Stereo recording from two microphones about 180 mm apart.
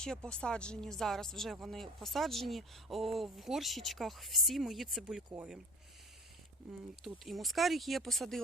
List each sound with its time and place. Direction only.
0.0 s speech: 5° left (ahead or behind)
6.6 s speech: centre (ahead or behind)